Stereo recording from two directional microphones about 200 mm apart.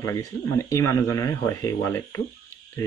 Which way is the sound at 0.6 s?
15° left (ahead or behind).